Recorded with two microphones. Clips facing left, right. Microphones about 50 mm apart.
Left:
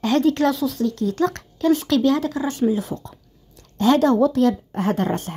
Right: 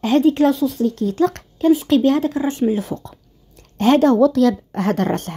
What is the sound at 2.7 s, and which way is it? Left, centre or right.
Speech, right.